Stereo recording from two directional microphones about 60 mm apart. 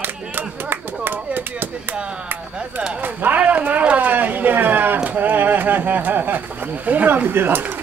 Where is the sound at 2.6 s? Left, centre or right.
Centre.